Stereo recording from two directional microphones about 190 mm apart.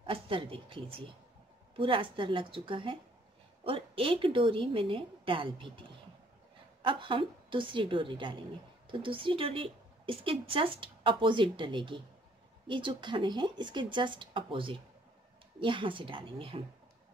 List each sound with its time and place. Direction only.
0.0 s a woman's voice: 30° right (ahead or behind)
6.8 s a woman's voice: 25° right (ahead or behind)